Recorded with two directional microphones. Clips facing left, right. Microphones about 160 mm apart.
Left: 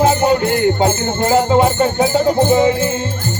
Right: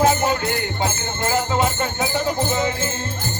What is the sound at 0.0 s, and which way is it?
Speech, 30° left (ahead or behind).